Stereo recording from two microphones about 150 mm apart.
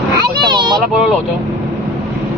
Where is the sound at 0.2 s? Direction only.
30° right (ahead or behind).